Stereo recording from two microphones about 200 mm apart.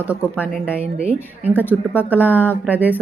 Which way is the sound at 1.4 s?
10° right (ahead or behind).